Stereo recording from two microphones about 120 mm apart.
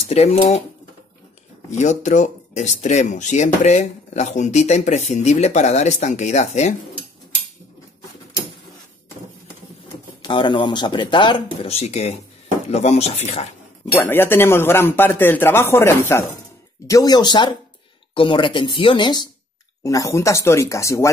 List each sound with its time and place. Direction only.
0.1 s speech: 60° left (ahead or behind)
1.7 s speech: 80° left
10.2 s speech: 40° left (ahead or behind)
11.6 s speech: 65° left (ahead or behind)
14.0 s a man's voice: 20° left (ahead or behind)
16.8 s speech: 30° left (ahead or behind)
19.8 s a man's voice: 25° left (ahead or behind)